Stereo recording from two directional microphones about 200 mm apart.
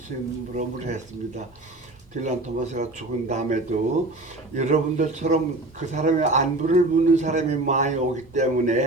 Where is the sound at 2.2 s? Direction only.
35° right (ahead or behind).